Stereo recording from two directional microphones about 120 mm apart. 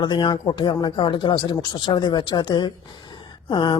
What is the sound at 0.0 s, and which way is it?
Speech, 40° left (ahead or behind).